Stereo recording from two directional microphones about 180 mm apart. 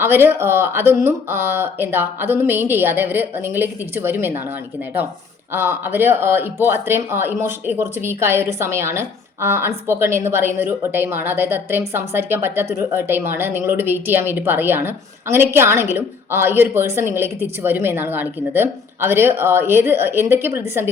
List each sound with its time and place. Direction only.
0.0 s speech: 10° right (ahead or behind)
5.5 s speech: 15° right (ahead or behind)